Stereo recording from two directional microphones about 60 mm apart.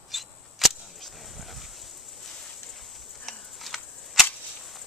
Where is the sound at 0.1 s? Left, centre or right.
Centre.